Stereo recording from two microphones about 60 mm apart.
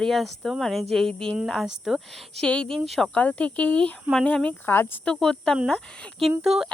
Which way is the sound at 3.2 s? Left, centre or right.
Left.